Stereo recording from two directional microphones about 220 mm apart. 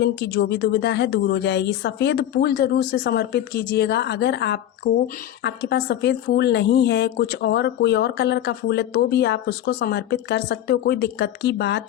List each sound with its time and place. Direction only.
0.0 s a woman's voice: 50° left (ahead or behind)